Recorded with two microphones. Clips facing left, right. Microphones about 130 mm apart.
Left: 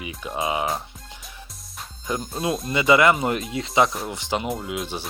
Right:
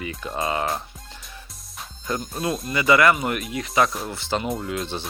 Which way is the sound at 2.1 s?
15° left (ahead or behind).